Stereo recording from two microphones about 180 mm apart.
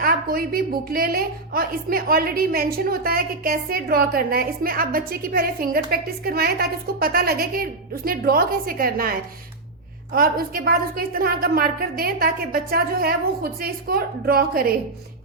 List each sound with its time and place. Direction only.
0.0 s a woman's voice: 55° right (ahead or behind)